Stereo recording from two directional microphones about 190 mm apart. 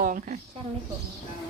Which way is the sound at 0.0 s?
45° right (ahead or behind).